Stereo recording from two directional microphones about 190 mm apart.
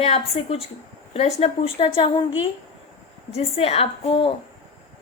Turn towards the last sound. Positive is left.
turn(degrees=30)  # may be behind; listen again after turning